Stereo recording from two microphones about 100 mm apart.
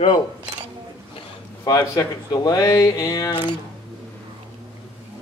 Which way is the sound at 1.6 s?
40° left (ahead or behind).